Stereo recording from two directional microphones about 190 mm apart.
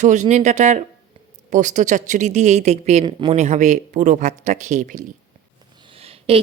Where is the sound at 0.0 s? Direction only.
40° right (ahead or behind).